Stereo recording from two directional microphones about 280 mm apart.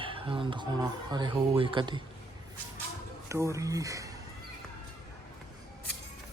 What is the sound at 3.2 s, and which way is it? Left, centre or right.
Speech, centre.